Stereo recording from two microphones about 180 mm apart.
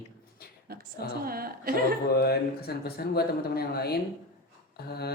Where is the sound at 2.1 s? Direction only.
60° left (ahead or behind).